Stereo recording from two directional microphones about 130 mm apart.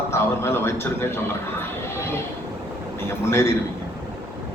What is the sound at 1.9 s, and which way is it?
Speech, 20° left (ahead or behind).